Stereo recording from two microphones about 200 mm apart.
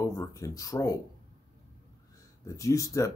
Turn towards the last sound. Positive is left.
turn(degrees=15)  # may be behind; listen again after turning